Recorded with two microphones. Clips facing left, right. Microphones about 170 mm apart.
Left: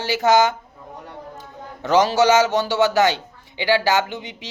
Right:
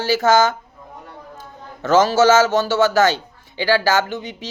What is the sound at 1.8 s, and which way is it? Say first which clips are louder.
A man's voice: right 2 dB; 15° left (ahead or behind).